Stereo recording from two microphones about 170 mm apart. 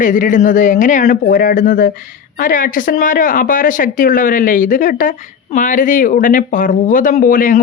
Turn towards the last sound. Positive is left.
turn(degrees=55)  # may be behind; listen again after turning